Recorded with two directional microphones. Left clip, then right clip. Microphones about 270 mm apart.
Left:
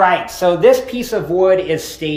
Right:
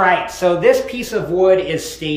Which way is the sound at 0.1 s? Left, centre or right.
Left.